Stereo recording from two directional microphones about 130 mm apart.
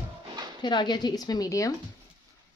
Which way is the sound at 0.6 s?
35° left (ahead or behind).